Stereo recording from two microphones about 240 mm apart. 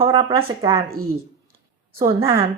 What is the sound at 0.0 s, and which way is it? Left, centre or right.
Speech, right.